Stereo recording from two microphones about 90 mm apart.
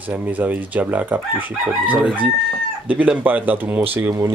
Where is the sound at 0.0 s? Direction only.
20° right (ahead or behind).